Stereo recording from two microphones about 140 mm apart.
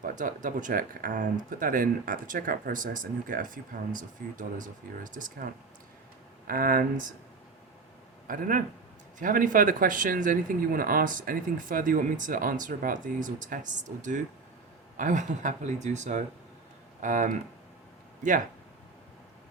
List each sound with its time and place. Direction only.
0.0 s speech: 70° right (ahead or behind)
6.5 s speech: 90° right
8.3 s speech: 75° right (ahead or behind)